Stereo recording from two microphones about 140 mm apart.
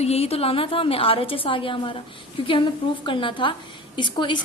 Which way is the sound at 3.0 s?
35° left (ahead or behind).